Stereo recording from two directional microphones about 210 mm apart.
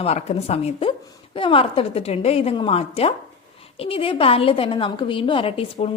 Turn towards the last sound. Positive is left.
turn(degrees=30)  # may be behind; listen again after turning